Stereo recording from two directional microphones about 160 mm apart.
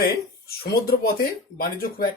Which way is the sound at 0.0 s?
75° left (ahead or behind).